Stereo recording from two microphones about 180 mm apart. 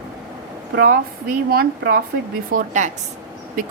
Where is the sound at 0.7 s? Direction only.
55° right (ahead or behind).